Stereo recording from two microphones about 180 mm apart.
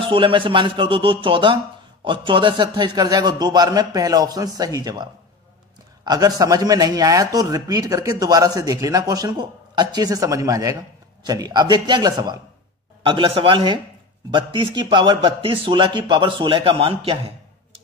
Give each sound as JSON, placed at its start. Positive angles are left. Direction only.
{"t": 0.0, "sound": "speech", "side_deg": -30}